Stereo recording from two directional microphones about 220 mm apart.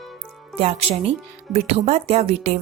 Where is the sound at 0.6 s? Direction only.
30° right (ahead or behind).